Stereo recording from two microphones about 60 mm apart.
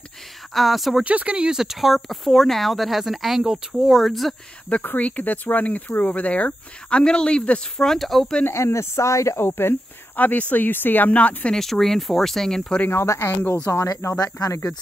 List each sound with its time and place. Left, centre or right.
0.6 s speech: centre
1.0 s speech: right
1.6 s speech: centre
3.8 s speech: centre
4.8 s speech: left
7.8 s speech: centre
8.5 s speech: left
9.4 s speech: left
11.5 s speech: centre
12.9 s speech: left
13.8 s speech: left